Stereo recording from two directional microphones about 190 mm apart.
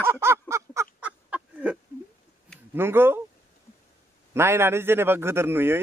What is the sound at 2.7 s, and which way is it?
Speech, 10° right (ahead or behind).